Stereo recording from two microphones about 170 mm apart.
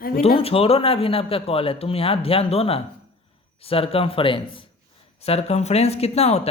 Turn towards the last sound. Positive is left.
turn(degrees=40)  # may be behind; listen again after turning